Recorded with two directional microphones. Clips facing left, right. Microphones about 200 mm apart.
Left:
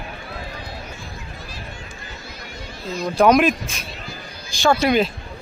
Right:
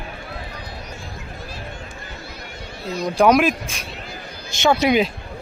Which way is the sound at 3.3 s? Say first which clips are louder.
Left 1 dB; 5° right (ahead or behind).